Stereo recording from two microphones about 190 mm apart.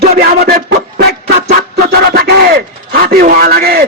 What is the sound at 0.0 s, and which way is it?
Music, 55° right (ahead or behind).